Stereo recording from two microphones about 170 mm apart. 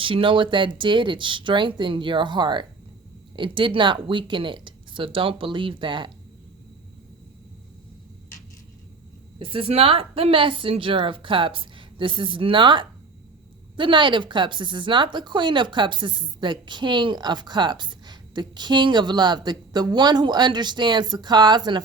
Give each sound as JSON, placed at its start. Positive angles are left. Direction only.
{"t": 0.0, "sound": "speech", "side_deg": -30}
{"t": 9.4, "sound": "a woman's voice", "side_deg": -30}